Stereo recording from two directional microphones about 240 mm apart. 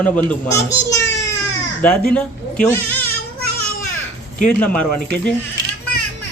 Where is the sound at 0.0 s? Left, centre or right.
Centre.